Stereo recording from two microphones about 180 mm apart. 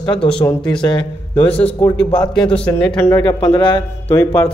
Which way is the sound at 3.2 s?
25° left (ahead or behind).